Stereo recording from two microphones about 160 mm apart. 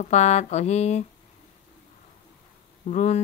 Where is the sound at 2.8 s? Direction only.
45° left (ahead or behind).